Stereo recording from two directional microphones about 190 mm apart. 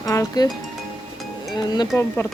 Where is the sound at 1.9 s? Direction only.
10° left (ahead or behind).